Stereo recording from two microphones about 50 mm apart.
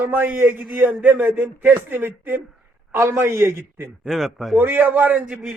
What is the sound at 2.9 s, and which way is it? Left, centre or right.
Speech, right.